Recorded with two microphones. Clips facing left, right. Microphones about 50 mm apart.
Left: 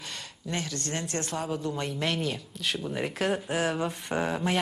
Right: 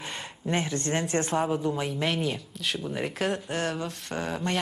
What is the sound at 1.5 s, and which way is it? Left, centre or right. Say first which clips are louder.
Speech: right 3 dB; centre.